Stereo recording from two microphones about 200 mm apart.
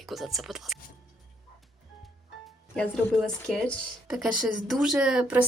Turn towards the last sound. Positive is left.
turn(degrees=-5)  # may be behind; listen again after turning